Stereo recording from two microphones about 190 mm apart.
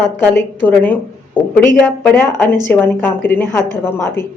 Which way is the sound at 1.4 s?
10° left (ahead or behind).